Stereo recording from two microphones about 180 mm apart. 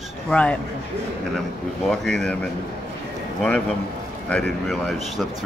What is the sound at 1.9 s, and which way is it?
Speech, 5° left (ahead or behind).